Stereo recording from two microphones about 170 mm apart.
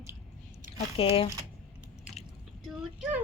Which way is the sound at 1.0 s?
35° left (ahead or behind).